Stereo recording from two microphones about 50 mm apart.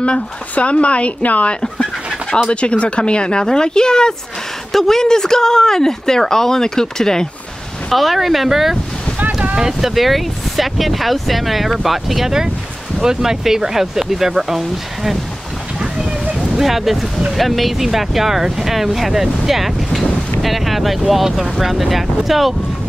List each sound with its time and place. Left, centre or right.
0.0 s speech: left
7.9 s speech: centre
16.5 s speech: centre